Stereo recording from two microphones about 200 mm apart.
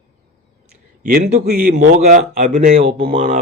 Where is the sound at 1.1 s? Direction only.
45° right (ahead or behind).